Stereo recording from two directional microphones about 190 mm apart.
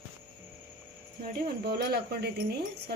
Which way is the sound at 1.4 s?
55° right (ahead or behind).